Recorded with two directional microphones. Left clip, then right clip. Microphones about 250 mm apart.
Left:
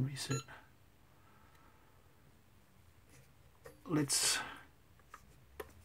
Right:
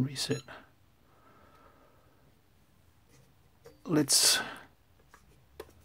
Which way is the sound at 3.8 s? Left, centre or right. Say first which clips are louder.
Right 9 dB; right.